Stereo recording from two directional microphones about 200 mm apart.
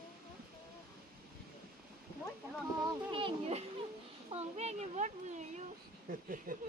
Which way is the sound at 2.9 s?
25° right (ahead or behind).